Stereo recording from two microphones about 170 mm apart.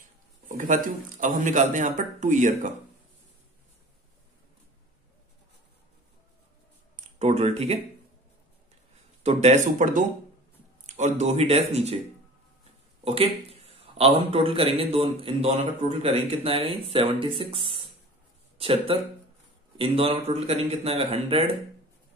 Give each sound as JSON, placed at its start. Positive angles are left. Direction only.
{"t": 0.6, "sound": "speech", "side_deg": -50}
{"t": 7.2, "sound": "speech", "side_deg": -40}
{"t": 9.2, "sound": "a man's voice", "side_deg": -40}
{"t": 13.0, "sound": "a sound", "side_deg": -35}
{"t": 14.1, "sound": "a man's voice", "side_deg": -35}